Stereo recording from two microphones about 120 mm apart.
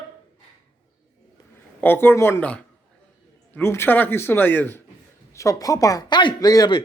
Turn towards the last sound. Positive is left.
turn(degrees=35)  # may be behind; listen again after turning